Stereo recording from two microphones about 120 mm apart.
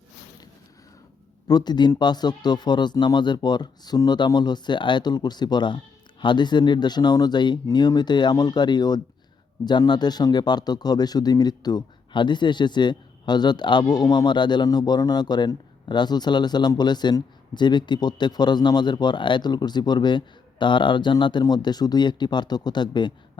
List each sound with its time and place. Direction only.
1.5 s speech: 35° left (ahead or behind)